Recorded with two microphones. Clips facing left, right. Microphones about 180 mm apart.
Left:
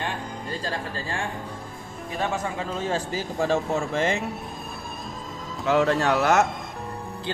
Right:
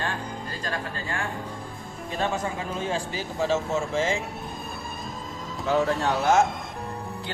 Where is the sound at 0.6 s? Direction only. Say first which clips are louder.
Right 1 dB; 30° left (ahead or behind).